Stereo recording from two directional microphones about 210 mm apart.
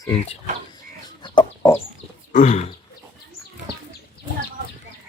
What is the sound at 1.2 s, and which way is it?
Chicken, 20° left (ahead or behind).